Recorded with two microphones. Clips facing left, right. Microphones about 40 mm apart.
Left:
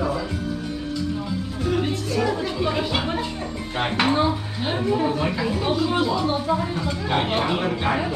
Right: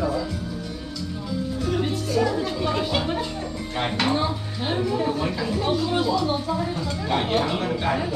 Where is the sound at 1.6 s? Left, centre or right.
Centre.